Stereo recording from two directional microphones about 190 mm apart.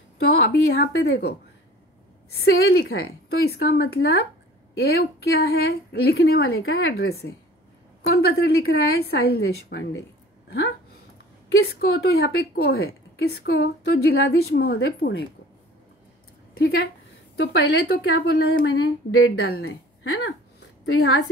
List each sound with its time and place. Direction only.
0.2 s a woman's voice: 55° left (ahead or behind)
2.3 s a woman's voice: 60° left (ahead or behind); by 7.0 s 90° left
7.0 s a woman's voice: 55° left (ahead or behind)
11.6 s a woman's voice: 55° left (ahead or behind)
16.5 s a woman's voice: 55° left (ahead or behind)